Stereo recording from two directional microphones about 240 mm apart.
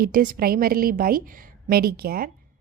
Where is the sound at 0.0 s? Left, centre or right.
Right.